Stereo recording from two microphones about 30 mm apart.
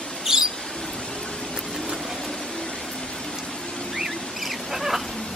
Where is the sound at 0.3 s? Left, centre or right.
Centre.